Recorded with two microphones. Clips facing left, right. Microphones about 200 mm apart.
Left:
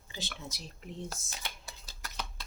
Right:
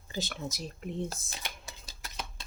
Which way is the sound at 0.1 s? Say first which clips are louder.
Right 7 dB; 40° right (ahead or behind).